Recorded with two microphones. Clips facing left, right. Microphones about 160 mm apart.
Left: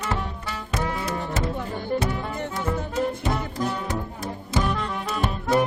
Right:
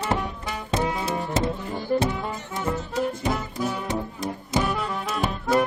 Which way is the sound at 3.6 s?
5° right (ahead or behind).